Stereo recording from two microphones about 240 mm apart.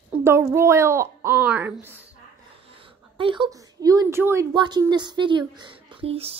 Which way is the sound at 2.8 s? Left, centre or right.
Right.